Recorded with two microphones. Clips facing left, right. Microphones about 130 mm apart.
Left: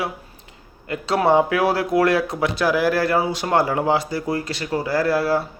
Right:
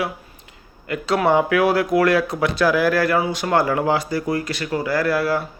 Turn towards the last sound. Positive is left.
turn(degrees=25)  # may be behind; listen again after turning